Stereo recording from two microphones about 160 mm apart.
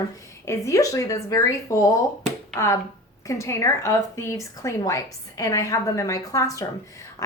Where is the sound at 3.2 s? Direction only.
20° left (ahead or behind).